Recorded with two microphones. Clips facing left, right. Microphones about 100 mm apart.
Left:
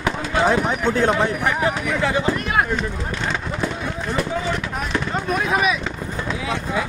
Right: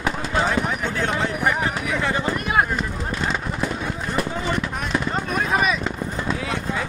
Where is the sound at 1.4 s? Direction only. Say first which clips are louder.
Left 2 dB; centre (ahead or behind).